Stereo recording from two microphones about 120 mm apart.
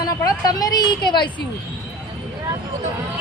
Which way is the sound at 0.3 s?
35° left (ahead or behind).